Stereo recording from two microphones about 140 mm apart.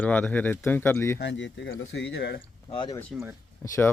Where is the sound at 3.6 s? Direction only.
20° left (ahead or behind).